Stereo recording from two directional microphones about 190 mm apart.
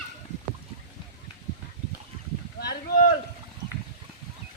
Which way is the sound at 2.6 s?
50° left (ahead or behind).